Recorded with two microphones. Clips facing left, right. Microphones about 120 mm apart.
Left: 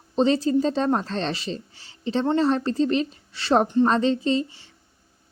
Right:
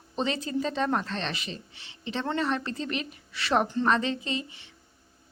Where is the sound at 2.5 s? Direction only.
35° left (ahead or behind).